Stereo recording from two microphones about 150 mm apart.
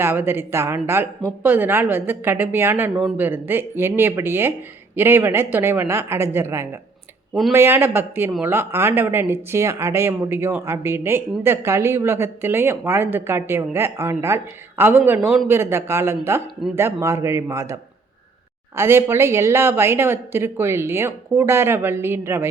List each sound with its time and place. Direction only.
0.0 s speech: 15° right (ahead or behind)
18.8 s speech: 15° right (ahead or behind)